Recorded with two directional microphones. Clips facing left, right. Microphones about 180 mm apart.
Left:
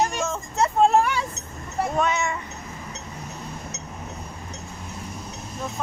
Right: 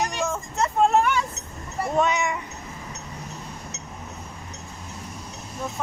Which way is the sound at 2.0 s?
15° right (ahead or behind).